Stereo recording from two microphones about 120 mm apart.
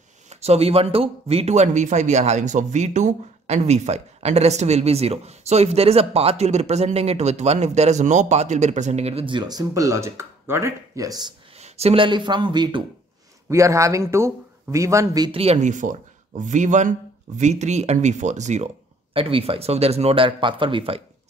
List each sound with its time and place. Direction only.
0.3 s speech: 60° right (ahead or behind); by 11.3 s 35° right (ahead or behind)
11.5 s speech: 60° right (ahead or behind); by 12.8 s 40° right (ahead or behind)
13.5 s a man's voice: 25° right (ahead or behind)
15.3 s speech: 60° right (ahead or behind); by 16.9 s 90° right
17.4 s speech: 70° right (ahead or behind)
19.1 s speech: 50° right (ahead or behind)
20.2 s speech: 40° right (ahead or behind)